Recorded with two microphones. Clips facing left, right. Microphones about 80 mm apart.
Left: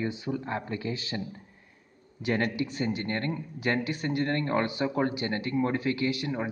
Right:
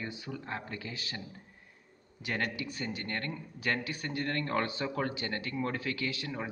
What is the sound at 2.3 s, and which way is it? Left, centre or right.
Speech, left.